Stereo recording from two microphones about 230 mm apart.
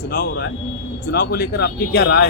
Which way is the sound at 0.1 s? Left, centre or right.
Left.